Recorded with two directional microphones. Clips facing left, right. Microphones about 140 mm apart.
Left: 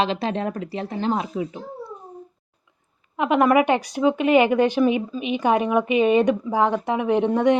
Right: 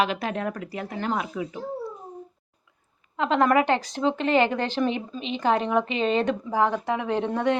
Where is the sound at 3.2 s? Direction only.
15° left (ahead or behind).